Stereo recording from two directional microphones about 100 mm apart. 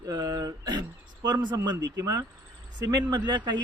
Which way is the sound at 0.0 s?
40° right (ahead or behind).